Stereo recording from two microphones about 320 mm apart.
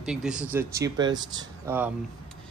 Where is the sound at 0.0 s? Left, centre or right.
Centre.